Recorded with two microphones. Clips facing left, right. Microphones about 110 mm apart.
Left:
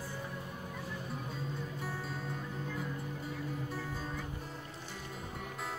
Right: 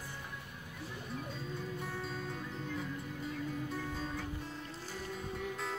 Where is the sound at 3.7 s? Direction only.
5° left (ahead or behind).